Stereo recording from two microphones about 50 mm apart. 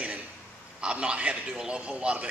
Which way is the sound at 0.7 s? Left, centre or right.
Centre.